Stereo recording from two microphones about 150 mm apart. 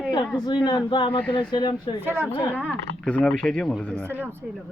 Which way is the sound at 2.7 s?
5° left (ahead or behind).